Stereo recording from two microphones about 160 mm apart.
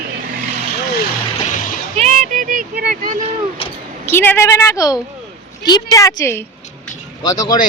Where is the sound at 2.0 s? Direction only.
50° right (ahead or behind); by 2.9 s 70° right (ahead or behind).